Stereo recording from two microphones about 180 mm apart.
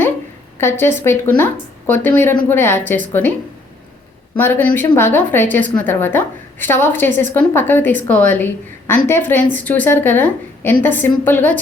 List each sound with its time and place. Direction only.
0.6 s a woman's voice: 15° left (ahead or behind)
4.4 s a woman's voice: 10° left (ahead or behind)